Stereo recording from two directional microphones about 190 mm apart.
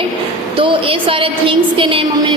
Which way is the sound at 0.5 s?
25° right (ahead or behind).